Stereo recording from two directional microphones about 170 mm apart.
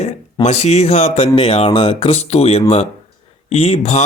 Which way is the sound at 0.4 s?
40° left (ahead or behind).